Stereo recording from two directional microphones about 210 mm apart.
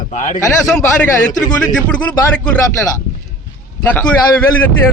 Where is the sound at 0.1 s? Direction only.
35° left (ahead or behind).